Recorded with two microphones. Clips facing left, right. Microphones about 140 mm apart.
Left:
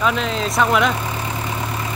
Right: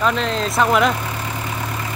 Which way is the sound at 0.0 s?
Centre (ahead or behind).